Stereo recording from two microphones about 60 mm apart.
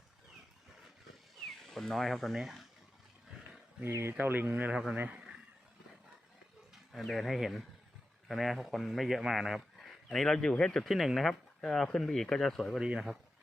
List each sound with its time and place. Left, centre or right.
1.5 s speech: centre
4.2 s speech: right
6.9 s speech: centre
10.8 s speech: centre
12.8 s speech: centre